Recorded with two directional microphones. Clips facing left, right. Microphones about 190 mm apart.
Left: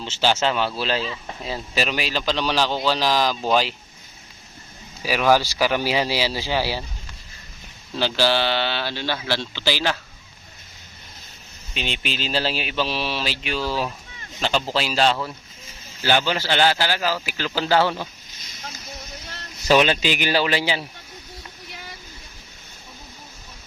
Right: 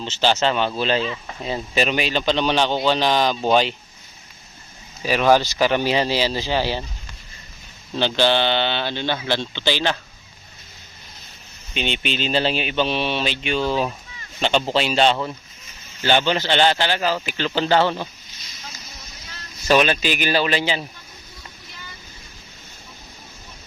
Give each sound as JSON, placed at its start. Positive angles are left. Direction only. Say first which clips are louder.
{"t": 0.0, "sound": "a man's voice", "louder": "right 2 dB", "side_deg": 10}
{"t": 5.3, "sound": "speech", "louder": "right 2 dB", "side_deg": 10}
{"t": 7.9, "sound": "a man's voice", "louder": "right 2 dB", "side_deg": 5}
{"t": 11.7, "sound": "a man's voice", "louder": "right 4 dB", "side_deg": 0}
{"t": 13.6, "sound": "speech", "louder": "right 4 dB", "side_deg": -20}
{"t": 14.7, "sound": "a man's voice", "louder": "right 2 dB", "side_deg": 0}
{"t": 19.6, "sound": "speech", "louder": "even", "side_deg": 15}